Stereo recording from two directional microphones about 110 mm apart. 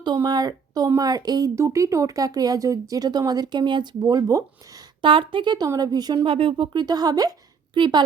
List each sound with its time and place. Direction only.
0.0 s speech: 40° right (ahead or behind)
5.0 s a woman's voice: 50° right (ahead or behind)
5.6 s speech: 35° right (ahead or behind)
6.2 s speech: 55° right (ahead or behind)